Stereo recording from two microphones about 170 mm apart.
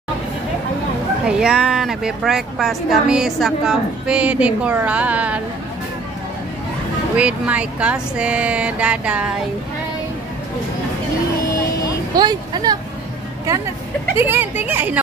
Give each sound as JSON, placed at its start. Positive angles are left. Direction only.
{"t": 1.2, "sound": "a woman's voice", "side_deg": -5}
{"t": 7.2, "sound": "speech", "side_deg": -5}
{"t": 12.2, "sound": "speech", "side_deg": -25}
{"t": 14.1, "sound": "speech", "side_deg": -10}